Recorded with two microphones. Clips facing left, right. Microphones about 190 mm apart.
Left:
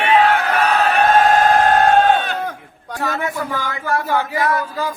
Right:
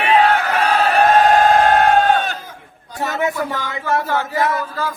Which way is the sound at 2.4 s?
70° left (ahead or behind).